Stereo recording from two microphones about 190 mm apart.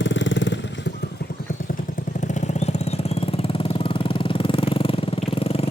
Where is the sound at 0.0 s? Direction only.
80° left.